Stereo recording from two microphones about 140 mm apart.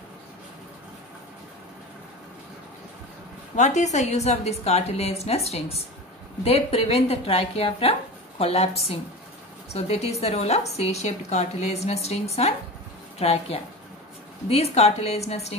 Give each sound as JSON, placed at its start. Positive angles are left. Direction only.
{"t": 3.5, "sound": "a woman's voice", "side_deg": 55}